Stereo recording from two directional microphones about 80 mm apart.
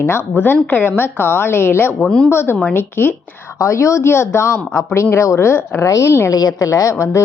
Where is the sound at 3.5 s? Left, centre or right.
Left.